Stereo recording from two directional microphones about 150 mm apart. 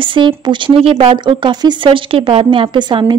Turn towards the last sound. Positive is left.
turn(degrees=-30)  # may be behind; listen again after turning